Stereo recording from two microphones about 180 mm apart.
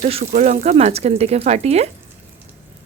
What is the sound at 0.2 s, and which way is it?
Frying, 45° right (ahead or behind).